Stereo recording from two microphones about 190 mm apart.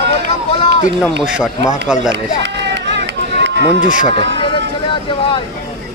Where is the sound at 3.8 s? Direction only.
45° left (ahead or behind).